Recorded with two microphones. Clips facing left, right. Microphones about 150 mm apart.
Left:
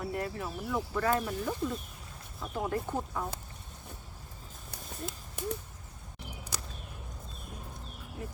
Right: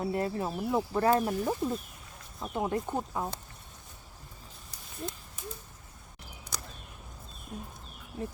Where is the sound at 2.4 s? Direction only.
20° right (ahead or behind).